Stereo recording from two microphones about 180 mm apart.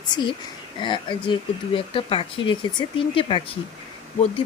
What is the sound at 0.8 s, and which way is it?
Speech, 25° left (ahead or behind).